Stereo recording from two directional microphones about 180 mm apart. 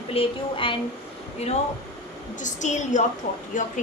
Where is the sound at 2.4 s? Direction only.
40° left (ahead or behind).